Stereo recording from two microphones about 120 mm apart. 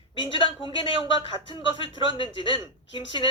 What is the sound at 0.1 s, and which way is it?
Speech, 45° left (ahead or behind).